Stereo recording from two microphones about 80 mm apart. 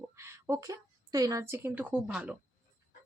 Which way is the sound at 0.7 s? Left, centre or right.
Right.